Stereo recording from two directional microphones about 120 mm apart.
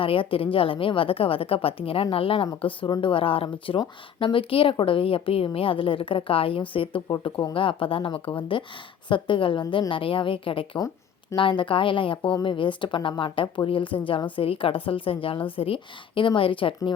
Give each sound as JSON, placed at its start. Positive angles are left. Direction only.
{"t": 0.0, "sound": "a woman's voice", "side_deg": 50}